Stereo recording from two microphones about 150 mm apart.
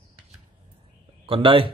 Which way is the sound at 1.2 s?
35° right (ahead or behind).